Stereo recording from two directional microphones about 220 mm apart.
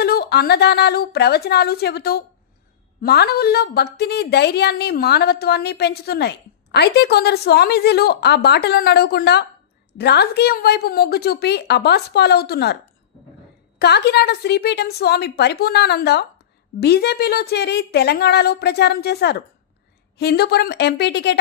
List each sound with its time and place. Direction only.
0.0 s a woman's voice: 45° left (ahead or behind)
13.7 s a woman's voice: 50° left (ahead or behind)